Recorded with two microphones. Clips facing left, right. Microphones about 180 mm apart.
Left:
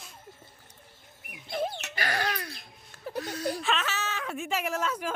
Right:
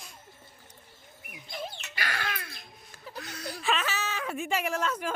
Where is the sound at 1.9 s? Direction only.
45° left (ahead or behind).